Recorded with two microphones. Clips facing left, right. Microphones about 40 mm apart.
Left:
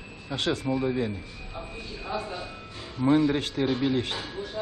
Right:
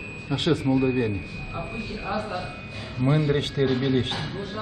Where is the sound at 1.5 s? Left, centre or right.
Right.